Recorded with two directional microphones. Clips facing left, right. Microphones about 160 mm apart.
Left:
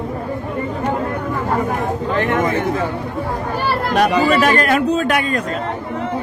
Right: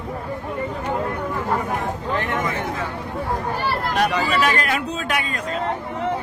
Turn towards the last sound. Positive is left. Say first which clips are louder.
# left 8 dB
turn(degrees=50)  # may be behind; listen again after turning